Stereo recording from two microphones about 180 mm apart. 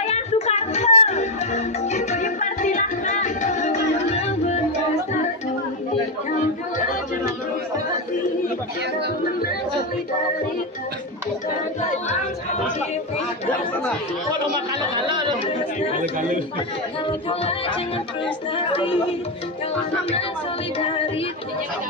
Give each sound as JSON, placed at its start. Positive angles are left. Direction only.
{"t": 0.0, "sound": "music", "side_deg": 35}
{"t": 15.0, "sound": "speech", "side_deg": -25}
{"t": 16.0, "sound": "a man's voice", "side_deg": -45}
{"t": 17.3, "sound": "music", "side_deg": 30}
{"t": 18.6, "sound": "speech", "side_deg": 30}